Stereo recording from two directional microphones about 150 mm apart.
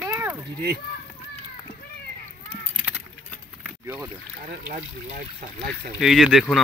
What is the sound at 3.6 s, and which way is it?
Boat, 10° right (ahead or behind).